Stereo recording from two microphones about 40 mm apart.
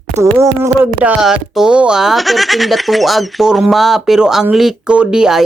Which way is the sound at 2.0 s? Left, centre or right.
Centre.